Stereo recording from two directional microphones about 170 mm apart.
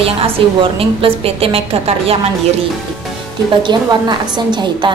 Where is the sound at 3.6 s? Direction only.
25° right (ahead or behind).